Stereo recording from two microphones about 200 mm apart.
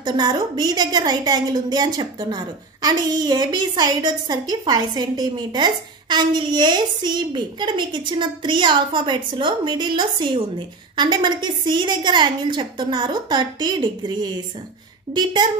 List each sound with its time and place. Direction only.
0.0 s a woman's voice: 20° right (ahead or behind)